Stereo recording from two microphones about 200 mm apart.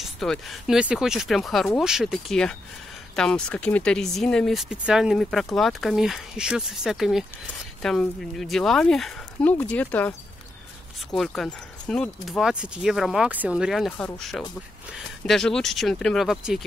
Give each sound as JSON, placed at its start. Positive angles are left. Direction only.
{"t": 0.0, "sound": "speech", "side_deg": 0}